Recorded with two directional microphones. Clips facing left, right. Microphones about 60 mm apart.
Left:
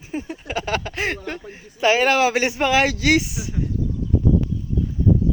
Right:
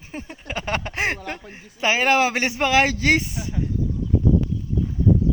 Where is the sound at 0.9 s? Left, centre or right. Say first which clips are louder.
Right 1 dB; right.